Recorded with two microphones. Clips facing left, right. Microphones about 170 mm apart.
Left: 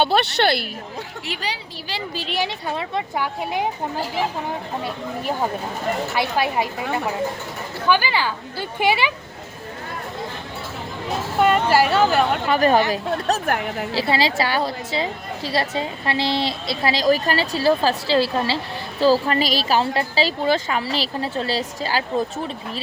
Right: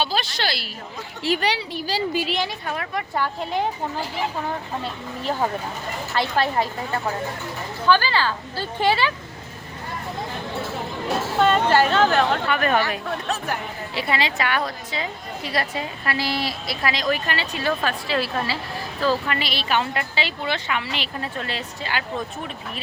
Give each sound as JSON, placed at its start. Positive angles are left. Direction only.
{"t": 0.0, "sound": "speech", "side_deg": 65}
{"t": 1.4, "sound": "a woman's voice", "side_deg": -70}
{"t": 2.5, "sound": "speech", "side_deg": 25}
{"t": 3.2, "sound": "a woman's voice", "side_deg": 10}
{"t": 6.1, "sound": "a woman's voice", "side_deg": 10}
{"t": 7.9, "sound": "a woman's voice", "side_deg": 15}
{"t": 11.3, "sound": "a woman's voice", "side_deg": 10}
{"t": 12.5, "sound": "a woman's voice", "side_deg": 35}